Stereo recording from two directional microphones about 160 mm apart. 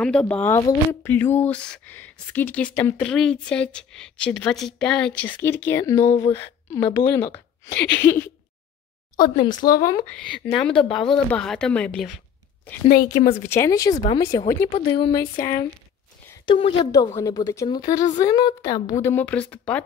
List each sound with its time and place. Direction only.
0.0 s a woman's voice: 5° left (ahead or behind)
9.1 s speech: 25° left (ahead or behind)
10.0 s speech: 5° left (ahead or behind)
12.8 s a woman's voice: 65° left (ahead or behind)
13.4 s speech: 15° left (ahead or behind)
14.7 s a woman's voice: 35° left (ahead or behind)
16.4 s a woman's voice: 35° left (ahead or behind)
16.9 s speech: 20° left (ahead or behind)